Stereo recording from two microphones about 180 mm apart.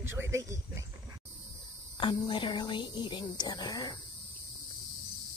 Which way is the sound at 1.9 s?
25° left (ahead or behind).